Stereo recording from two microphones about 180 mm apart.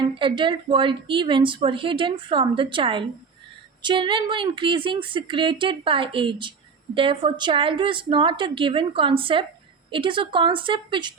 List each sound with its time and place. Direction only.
0.2 s speech: 25° right (ahead or behind)